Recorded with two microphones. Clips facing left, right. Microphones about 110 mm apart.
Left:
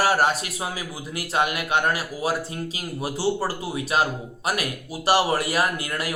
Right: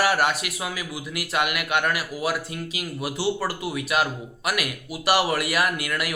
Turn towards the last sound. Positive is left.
turn(degrees=35)  # may be behind; listen again after turning